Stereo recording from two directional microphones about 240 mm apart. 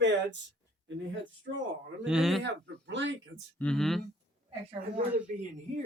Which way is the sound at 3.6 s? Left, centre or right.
Centre.